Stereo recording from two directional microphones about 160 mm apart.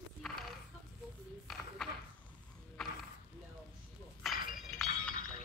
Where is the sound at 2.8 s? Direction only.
Centre (ahead or behind).